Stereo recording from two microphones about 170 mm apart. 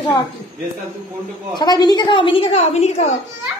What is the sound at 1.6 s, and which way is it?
A woman's voice, 25° left (ahead or behind).